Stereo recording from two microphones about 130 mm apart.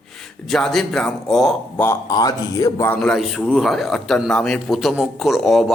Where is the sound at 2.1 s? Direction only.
30° left (ahead or behind).